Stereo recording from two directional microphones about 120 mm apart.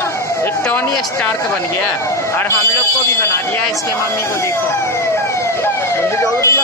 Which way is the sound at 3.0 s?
20° left (ahead or behind).